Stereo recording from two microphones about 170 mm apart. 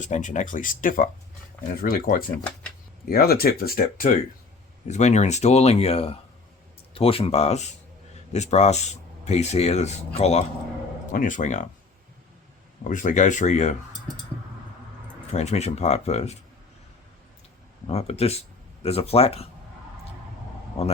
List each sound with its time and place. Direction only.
0.0 s speech: 45° left (ahead or behind)
4.9 s speech: 40° left (ahead or behind)
11.1 s speech: 50° left (ahead or behind)
12.8 s speech: 50° left (ahead or behind)
15.3 s speech: 40° left (ahead or behind)
17.8 s speech: 35° left (ahead or behind)
20.8 s speech: 35° left (ahead or behind)